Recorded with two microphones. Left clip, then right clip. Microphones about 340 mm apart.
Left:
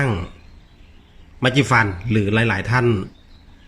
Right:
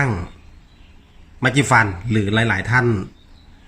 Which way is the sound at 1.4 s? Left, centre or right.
Centre.